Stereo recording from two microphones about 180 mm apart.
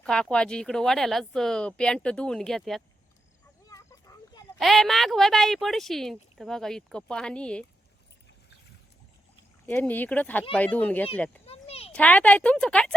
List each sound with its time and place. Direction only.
0.0 s speech: 5° left (ahead or behind)
3.7 s a sound: 20° left (ahead or behind)
4.5 s speech: centre (ahead or behind)
9.6 s a woman's voice: 10° left (ahead or behind)
11.4 s a sound: 35° left (ahead or behind)
11.9 s a woman's voice: 5° left (ahead or behind)